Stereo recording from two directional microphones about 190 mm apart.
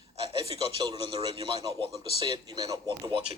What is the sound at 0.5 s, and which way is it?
A man's voice, 25° right (ahead or behind).